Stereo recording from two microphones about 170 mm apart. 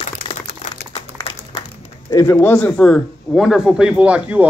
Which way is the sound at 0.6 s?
50° left (ahead or behind).